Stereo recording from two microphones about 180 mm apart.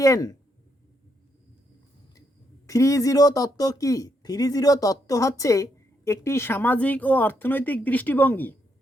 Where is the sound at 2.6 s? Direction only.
20° left (ahead or behind).